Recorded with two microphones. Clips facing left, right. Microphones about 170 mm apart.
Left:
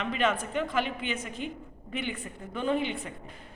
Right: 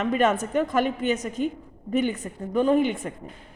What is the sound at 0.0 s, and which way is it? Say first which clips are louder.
A woman's voice: right 6 dB; 45° right (ahead or behind).